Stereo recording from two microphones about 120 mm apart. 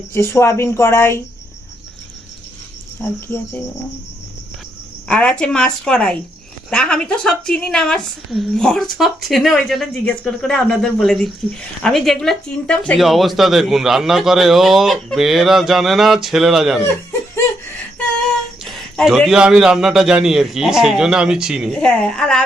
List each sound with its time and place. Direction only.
0.1 s speech: 25° left (ahead or behind)
3.0 s a woman's voice: 20° left (ahead or behind)
5.0 s a woman's voice: 10° left (ahead or behind)
16.8 s a sound: 20° left (ahead or behind)
18.6 s a woman's voice: centre (ahead or behind)
21.7 s a woman's voice: 5° left (ahead or behind)